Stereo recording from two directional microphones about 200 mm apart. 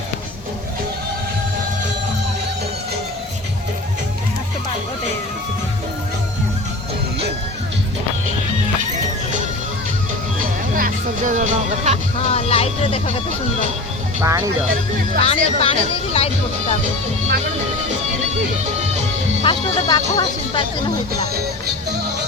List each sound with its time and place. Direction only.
10.8 s music: 40° right (ahead or behind)
12.3 s music: 30° left (ahead or behind)
14.2 s speech: 15° right (ahead or behind)
15.2 s speech: 30° left (ahead or behind)
19.4 s speech: 20° left (ahead or behind)